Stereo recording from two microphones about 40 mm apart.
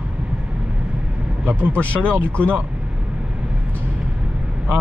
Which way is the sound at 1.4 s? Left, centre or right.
Right.